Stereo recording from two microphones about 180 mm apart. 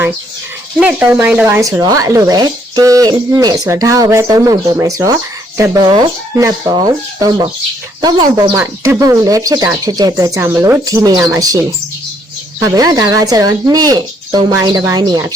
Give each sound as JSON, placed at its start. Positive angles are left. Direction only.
{"t": 0.8, "sound": "speech", "side_deg": -10}